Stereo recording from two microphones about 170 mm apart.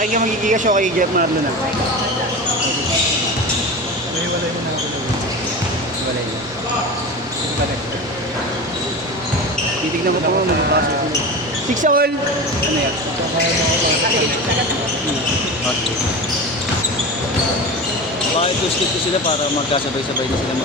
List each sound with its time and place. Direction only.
0.0 s speech: 50° right (ahead or behind)
11.8 s speech: 60° right (ahead or behind)